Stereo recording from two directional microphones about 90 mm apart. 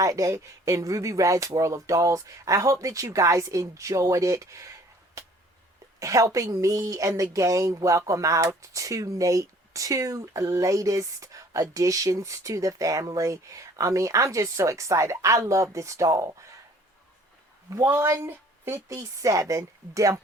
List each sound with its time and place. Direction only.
0.0 s a woman's voice: 40° right (ahead or behind)
6.0 s a woman's voice: 40° right (ahead or behind)
17.7 s a woman's voice: 30° right (ahead or behind)
18.9 s a woman's voice: 35° right (ahead or behind)